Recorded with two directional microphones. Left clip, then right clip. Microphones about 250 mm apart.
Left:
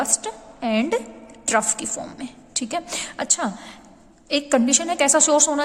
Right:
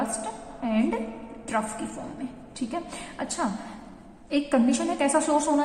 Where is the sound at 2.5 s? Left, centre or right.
Left.